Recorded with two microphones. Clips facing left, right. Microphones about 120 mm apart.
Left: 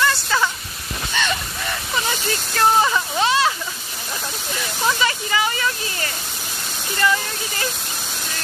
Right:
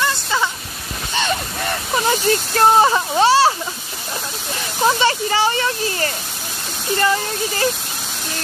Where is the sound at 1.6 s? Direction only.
40° right (ahead or behind).